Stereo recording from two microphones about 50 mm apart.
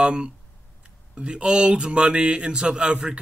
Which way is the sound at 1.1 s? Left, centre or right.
Right.